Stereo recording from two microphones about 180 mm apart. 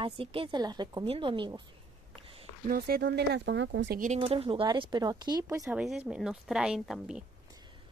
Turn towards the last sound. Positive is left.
turn(degrees=-5)  # may be behind; listen again after turning